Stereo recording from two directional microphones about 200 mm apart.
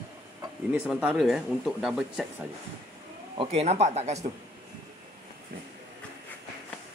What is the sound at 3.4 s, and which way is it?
Speech, 30° right (ahead or behind).